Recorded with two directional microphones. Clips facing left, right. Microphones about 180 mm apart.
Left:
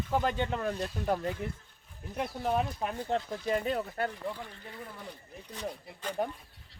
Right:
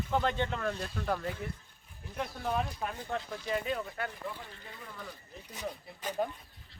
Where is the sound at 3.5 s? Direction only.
40° left (ahead or behind).